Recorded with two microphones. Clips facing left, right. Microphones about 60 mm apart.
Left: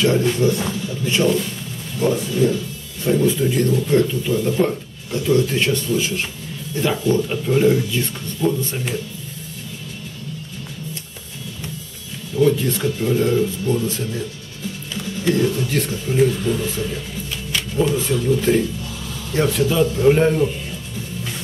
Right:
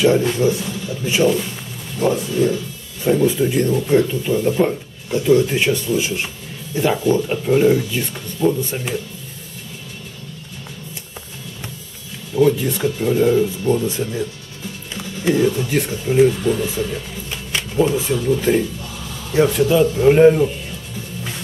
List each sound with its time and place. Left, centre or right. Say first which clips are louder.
0.0 s speech: right 2 dB; centre
12.4 s speech: right 1 dB; centre
15.0 s speech: right 2 dB; centre